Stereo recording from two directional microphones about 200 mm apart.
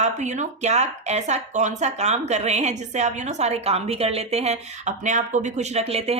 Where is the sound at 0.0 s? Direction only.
35° right (ahead or behind).